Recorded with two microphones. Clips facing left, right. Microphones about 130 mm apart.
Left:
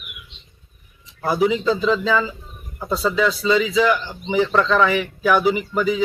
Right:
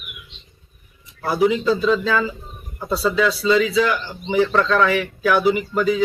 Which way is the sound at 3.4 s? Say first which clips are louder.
Right 1 dB; 15° left (ahead or behind).